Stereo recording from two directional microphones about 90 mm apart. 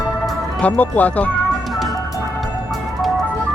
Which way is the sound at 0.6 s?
15° left (ahead or behind).